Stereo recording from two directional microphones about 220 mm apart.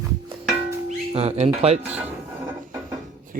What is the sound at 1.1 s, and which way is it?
Speech, 25° right (ahead or behind).